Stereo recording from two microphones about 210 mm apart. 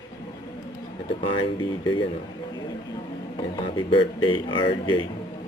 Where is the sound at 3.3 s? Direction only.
25° left (ahead or behind).